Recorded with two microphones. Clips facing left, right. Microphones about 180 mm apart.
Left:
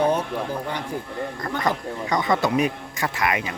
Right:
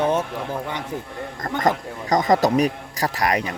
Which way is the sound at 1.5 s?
45° right (ahead or behind).